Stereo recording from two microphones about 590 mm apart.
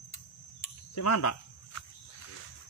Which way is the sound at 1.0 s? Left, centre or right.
Left.